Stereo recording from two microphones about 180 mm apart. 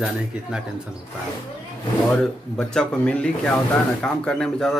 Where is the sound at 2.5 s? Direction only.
5° left (ahead or behind).